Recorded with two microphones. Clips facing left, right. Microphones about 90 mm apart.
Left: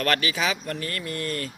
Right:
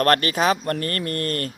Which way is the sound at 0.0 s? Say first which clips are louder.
Right 6 dB; 45° right (ahead or behind).